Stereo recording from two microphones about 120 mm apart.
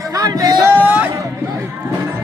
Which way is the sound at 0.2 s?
30° right (ahead or behind).